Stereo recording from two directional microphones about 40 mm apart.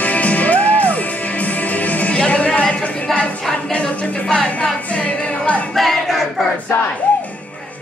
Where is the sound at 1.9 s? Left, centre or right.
Left.